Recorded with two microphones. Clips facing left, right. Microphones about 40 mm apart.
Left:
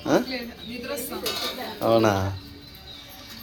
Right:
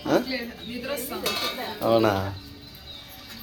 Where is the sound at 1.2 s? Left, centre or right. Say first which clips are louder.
Right 2 dB; right.